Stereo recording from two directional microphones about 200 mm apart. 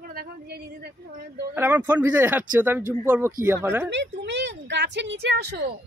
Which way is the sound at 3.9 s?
60° right (ahead or behind).